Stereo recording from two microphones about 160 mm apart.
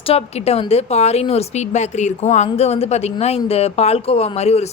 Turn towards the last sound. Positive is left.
turn(degrees=40)  # may be behind; listen again after turning